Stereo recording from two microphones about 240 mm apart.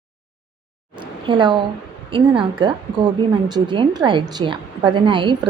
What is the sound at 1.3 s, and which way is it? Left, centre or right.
A woman's voice, centre.